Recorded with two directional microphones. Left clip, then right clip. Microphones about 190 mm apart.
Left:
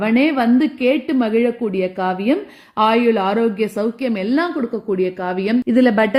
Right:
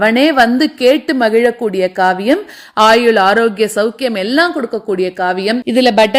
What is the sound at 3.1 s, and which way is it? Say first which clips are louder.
A woman's voice: right 7 dB; 20° right (ahead or behind).